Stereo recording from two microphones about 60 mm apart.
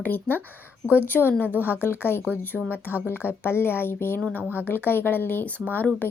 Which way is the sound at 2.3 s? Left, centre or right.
Left.